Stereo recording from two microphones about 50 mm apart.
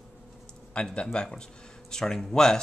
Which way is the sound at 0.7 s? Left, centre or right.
Centre.